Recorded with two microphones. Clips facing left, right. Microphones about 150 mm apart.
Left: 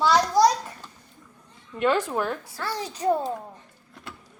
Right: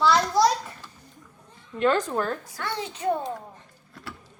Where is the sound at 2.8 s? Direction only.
35° left (ahead or behind).